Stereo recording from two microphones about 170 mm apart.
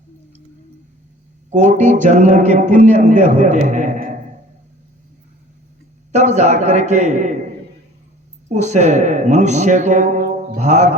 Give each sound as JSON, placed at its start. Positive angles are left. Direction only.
{"t": 1.5, "sound": "a man's voice", "side_deg": -45}
{"t": 6.1, "sound": "a man's voice", "side_deg": -45}
{"t": 8.4, "sound": "a man's voice", "side_deg": -45}